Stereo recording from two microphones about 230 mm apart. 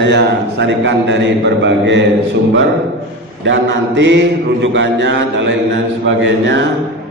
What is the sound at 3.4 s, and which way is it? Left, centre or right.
A man's voice, right.